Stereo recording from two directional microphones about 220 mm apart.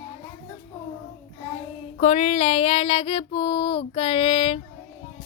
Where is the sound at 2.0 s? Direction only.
30° left (ahead or behind).